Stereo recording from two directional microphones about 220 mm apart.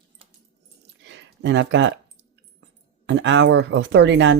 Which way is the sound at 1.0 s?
55° right (ahead or behind).